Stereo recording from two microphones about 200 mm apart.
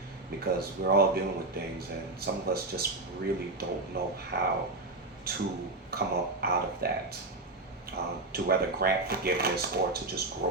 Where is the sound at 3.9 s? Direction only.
50° right (ahead or behind).